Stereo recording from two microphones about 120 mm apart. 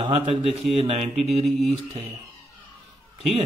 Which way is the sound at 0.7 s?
55° right (ahead or behind).